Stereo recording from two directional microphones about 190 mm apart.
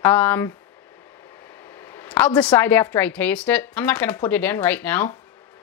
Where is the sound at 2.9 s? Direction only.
10° left (ahead or behind).